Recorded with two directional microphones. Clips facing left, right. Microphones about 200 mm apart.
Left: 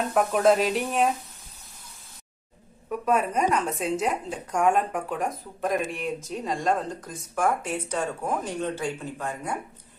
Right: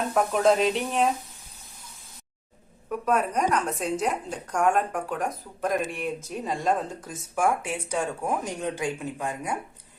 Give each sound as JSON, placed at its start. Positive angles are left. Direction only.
{"t": 0.1, "sound": "a woman's voice", "side_deg": 5}
{"t": 2.9, "sound": "a woman's voice", "side_deg": 0}